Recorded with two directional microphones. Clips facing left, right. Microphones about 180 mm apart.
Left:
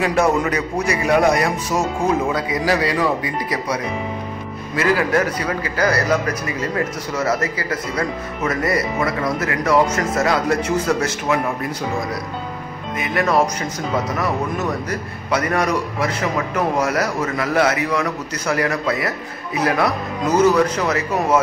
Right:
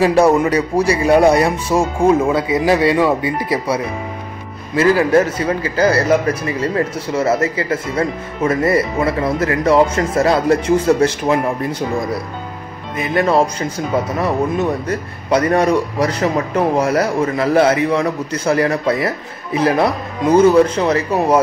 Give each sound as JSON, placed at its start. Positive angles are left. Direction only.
{"t": 0.0, "sound": "speech", "side_deg": -30}
{"t": 12.9, "sound": "speech", "side_deg": -30}